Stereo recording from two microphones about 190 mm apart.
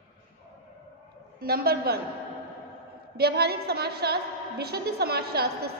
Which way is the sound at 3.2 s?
55° right (ahead or behind).